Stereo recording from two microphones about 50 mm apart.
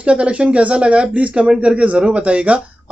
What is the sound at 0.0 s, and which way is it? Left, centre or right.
Speech, right.